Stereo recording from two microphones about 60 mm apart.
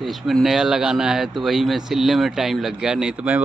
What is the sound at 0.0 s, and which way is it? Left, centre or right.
Speech, centre.